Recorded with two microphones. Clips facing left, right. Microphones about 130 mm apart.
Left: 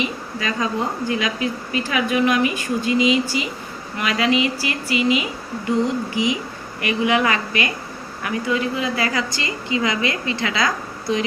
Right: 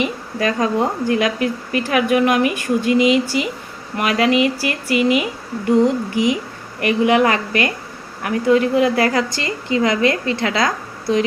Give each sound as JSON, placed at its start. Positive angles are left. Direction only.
{"t": 0.0, "sound": "speech", "side_deg": -55}